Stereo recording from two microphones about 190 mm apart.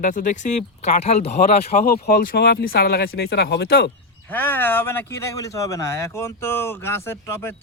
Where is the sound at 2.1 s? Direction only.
50° left (ahead or behind).